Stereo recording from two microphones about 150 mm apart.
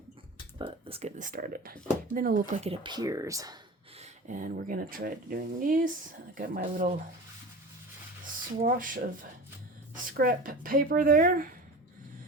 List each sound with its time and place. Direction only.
0.6 s speech: 40° right (ahead or behind)
1.2 s speech: 60° right (ahead or behind)
2.6 s speech: 40° right (ahead or behind); by 3.6 s 25° right (ahead or behind)
3.9 s speech: 50° right (ahead or behind)
8.6 s speech: 65° right (ahead or behind)